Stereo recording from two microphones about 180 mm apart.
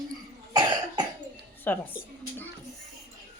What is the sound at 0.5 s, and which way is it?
Cough, 25° right (ahead or behind).